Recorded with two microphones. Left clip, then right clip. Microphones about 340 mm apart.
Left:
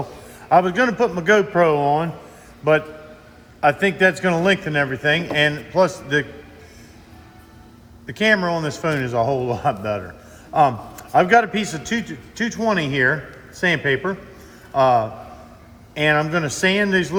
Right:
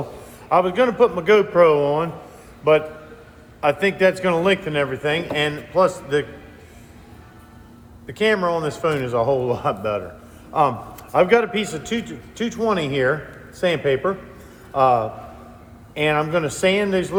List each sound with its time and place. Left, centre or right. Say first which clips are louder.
0.4 s a man's voice: left 1 dB; left
8.0 s a man's voice: left 1 dB; left